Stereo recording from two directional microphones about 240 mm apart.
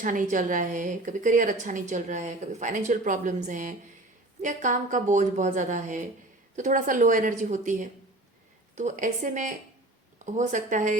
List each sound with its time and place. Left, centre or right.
0.0 s a woman's voice: right